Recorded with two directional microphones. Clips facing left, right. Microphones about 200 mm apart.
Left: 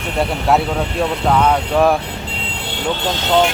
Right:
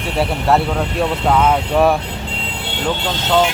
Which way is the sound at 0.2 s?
Centre (ahead or behind).